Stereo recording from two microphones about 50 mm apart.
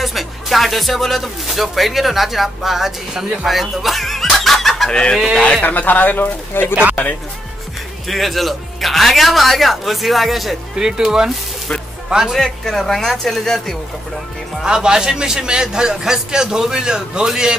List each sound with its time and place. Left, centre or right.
0.0 s speech: centre
5.4 s speech: left
6.7 s speech: right
8.1 s a man's voice: centre
12.4 s speech: centre
14.6 s a man's voice: centre